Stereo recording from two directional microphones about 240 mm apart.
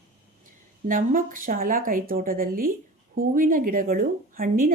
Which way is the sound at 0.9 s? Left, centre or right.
Right.